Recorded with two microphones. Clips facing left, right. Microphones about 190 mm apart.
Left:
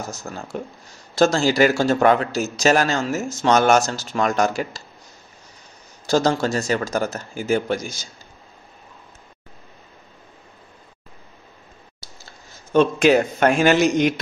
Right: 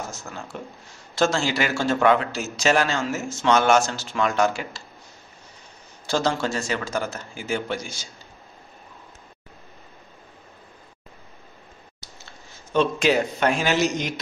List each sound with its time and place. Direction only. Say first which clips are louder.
0.1 s speech: left 5 dB; 40° left (ahead or behind)
6.0 s speech: left 5 dB; 40° left (ahead or behind)
12.7 s a man's voice: left 5 dB; 50° left (ahead or behind)